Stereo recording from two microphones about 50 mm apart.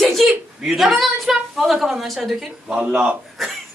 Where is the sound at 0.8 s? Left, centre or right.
Centre.